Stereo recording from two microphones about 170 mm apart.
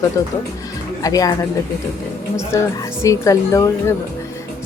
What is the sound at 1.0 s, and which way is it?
Speech, 20° left (ahead or behind).